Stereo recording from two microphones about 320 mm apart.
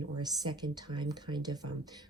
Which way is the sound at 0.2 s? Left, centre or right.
Centre.